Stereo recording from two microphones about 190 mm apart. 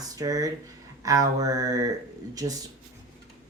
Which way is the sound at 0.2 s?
20° right (ahead or behind).